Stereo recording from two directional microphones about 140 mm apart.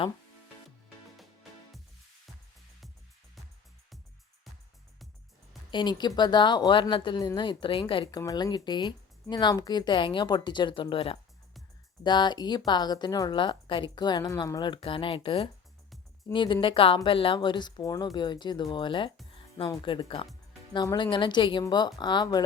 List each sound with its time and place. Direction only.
5.7 s speech: 30° left (ahead or behind)
8.2 s speech: 25° left (ahead or behind)